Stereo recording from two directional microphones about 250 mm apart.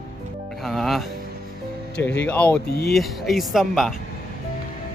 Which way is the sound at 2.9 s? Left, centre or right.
Centre.